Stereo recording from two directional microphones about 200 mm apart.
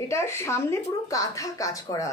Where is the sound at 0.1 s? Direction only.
15° left (ahead or behind).